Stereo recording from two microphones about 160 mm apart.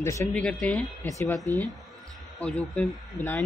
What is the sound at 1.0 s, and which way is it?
Speech, 20° left (ahead or behind).